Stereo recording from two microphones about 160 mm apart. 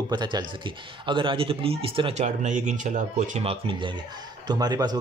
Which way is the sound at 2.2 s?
50° right (ahead or behind).